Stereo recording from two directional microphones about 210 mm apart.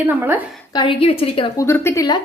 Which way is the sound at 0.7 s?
25° left (ahead or behind).